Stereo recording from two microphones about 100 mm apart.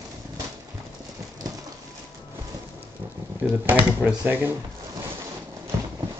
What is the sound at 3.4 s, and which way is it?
Speech, 15° right (ahead or behind).